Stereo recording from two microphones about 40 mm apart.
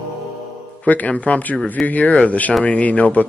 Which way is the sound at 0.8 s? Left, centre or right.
Left.